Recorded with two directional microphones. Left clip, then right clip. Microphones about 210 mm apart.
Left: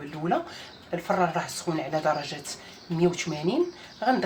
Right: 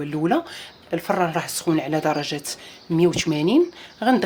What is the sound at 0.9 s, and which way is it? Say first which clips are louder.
Speech: right 4 dB; 50° right (ahead or behind).